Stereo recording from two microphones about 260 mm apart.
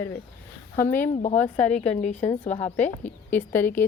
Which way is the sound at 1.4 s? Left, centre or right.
Centre.